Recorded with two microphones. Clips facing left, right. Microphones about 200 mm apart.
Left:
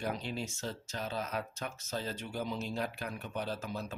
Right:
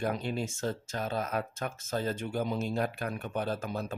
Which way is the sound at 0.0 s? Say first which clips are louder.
Right 5 dB; 50° right (ahead or behind).